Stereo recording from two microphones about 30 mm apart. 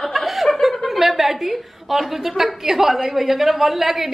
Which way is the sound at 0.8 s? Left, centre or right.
Centre.